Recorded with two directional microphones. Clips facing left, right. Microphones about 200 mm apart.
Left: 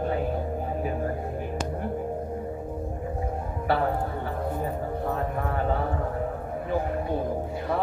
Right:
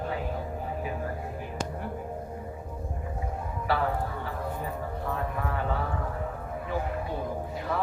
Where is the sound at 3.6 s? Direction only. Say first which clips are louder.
Left 3 dB; 45° left (ahead or behind).